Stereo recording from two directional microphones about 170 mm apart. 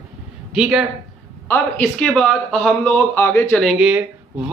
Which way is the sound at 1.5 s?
10° left (ahead or behind).